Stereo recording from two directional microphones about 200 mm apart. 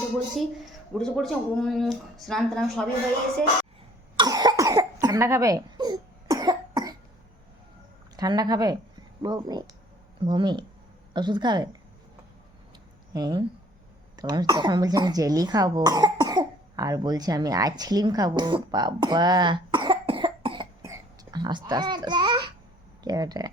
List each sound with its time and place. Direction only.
0.3 s speech: centre (ahead or behind)
4.2 s cough: 20° right (ahead or behind)
8.1 s speech: 20° right (ahead or behind)
13.1 s speech: 20° right (ahead or behind)
20.8 s a sound: 20° right (ahead or behind)
23.0 s speech: 20° right (ahead or behind)